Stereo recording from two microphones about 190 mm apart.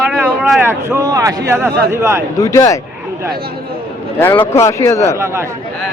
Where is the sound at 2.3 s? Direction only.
15° left (ahead or behind).